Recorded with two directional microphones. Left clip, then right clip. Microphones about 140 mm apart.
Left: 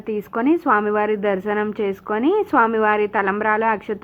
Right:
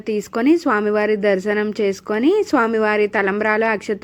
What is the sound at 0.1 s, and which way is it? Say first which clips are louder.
A woman's voice: right 3 dB; 30° right (ahead or behind).